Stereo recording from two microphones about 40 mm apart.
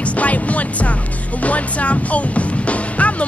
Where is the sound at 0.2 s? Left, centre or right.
Left.